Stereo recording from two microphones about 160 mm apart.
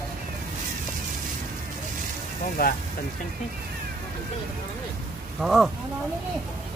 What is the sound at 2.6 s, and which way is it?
Speech, 65° left (ahead or behind).